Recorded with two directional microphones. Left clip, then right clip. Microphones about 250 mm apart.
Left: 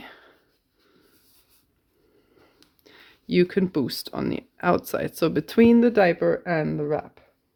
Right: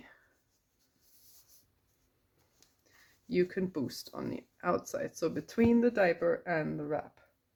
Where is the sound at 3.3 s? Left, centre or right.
Left.